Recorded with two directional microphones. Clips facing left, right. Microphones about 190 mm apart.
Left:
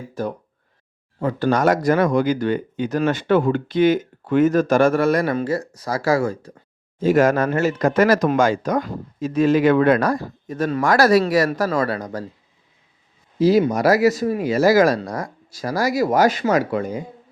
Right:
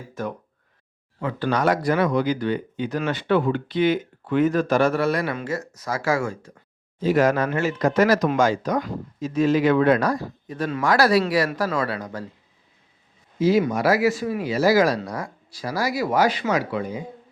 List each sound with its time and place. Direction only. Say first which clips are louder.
0.1 s speech: left 3 dB; 35° left (ahead or behind)
7.0 s speech: left 3 dB; 50° left (ahead or behind)
13.4 s speech: left 3 dB; 35° left (ahead or behind)